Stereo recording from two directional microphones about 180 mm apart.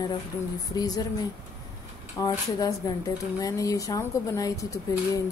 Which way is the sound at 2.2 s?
20° left (ahead or behind).